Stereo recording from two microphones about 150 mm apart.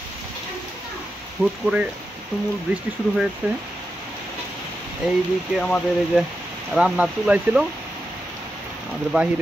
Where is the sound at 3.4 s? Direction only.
10° right (ahead or behind).